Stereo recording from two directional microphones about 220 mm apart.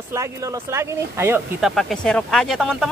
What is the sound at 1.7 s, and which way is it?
Speech, 5° left (ahead or behind).